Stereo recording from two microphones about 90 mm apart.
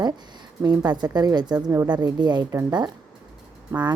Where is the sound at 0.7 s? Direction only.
50° right (ahead or behind).